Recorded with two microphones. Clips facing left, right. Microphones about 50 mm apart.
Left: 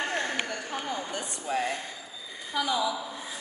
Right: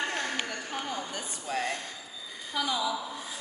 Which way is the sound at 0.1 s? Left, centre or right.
Left.